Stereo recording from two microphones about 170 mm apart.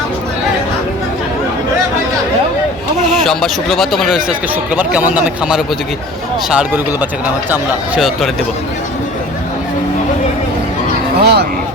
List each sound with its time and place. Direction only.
3.1 s speech: centre (ahead or behind)
11.2 s speech: 75° right (ahead or behind)